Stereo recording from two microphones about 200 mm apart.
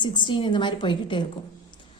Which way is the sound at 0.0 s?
20° left (ahead or behind).